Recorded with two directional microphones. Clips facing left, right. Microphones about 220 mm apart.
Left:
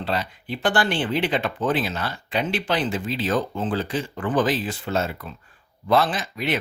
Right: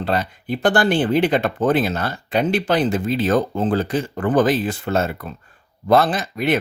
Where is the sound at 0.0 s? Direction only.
50° right (ahead or behind).